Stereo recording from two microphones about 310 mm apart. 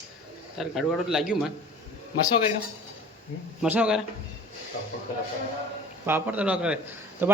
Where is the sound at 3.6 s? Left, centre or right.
Centre.